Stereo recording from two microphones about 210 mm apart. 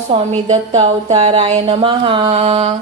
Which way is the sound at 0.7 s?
30° right (ahead or behind).